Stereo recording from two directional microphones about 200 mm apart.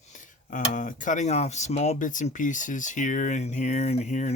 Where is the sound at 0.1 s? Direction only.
40° left (ahead or behind).